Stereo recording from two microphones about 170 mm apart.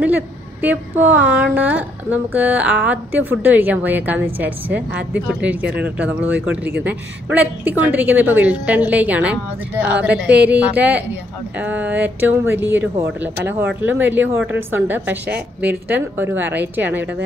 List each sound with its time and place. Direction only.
0.0 s speech: 10° right (ahead or behind)